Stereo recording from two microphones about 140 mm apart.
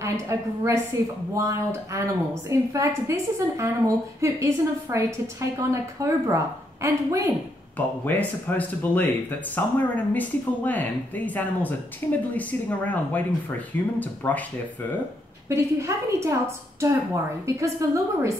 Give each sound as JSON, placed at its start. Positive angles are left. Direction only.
{"t": 0.0, "sound": "a woman's voice", "side_deg": -20}
{"t": 7.7, "sound": "speech", "side_deg": 10}
{"t": 15.4, "sound": "a woman's voice", "side_deg": -20}